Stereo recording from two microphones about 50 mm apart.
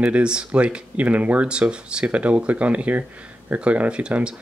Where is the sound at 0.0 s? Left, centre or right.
Centre.